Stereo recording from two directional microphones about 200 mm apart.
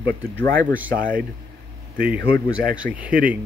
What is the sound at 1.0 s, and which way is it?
Speech, 45° right (ahead or behind).